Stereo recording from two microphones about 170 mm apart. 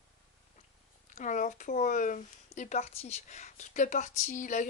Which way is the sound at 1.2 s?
50° left (ahead or behind).